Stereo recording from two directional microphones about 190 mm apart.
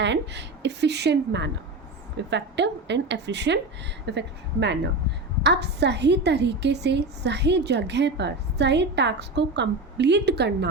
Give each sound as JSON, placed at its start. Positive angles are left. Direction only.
{"t": 0.0, "sound": "a woman's voice", "side_deg": -65}